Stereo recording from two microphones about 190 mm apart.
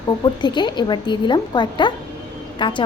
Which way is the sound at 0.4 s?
25° left (ahead or behind).